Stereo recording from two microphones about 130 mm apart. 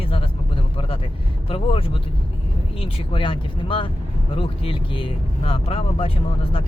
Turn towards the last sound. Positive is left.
turn(degrees=45)  # may be behind; listen again after turning